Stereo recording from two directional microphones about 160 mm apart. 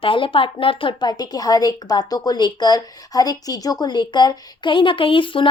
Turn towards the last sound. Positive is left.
turn(degrees=30)  # may be behind; listen again after turning